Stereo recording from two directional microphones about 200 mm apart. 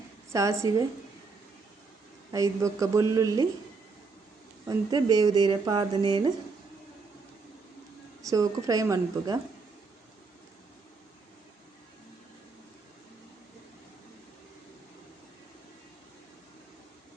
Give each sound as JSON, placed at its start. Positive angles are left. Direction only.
{"t": 0.3, "sound": "speech", "side_deg": -15}
{"t": 2.3, "sound": "speech", "side_deg": -15}
{"t": 4.6, "sound": "speech", "side_deg": -20}
{"t": 8.3, "sound": "speech", "side_deg": -15}